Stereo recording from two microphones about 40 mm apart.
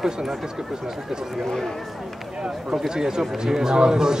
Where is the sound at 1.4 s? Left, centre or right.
Centre.